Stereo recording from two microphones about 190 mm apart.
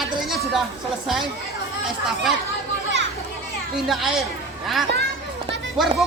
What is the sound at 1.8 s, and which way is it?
Speech, centre (ahead or behind).